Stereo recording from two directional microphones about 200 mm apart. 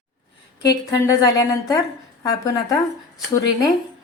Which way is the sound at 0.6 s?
15° left (ahead or behind).